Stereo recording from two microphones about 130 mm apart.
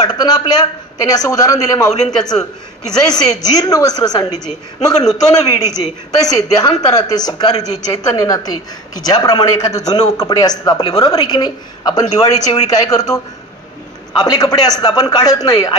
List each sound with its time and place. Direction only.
0.0 s a man's voice: 30° left (ahead or behind)
5.3 s a woman's voice: 30° left (ahead or behind)